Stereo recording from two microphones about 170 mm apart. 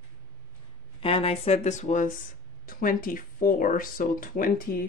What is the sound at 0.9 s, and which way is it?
Speech, 30° left (ahead or behind).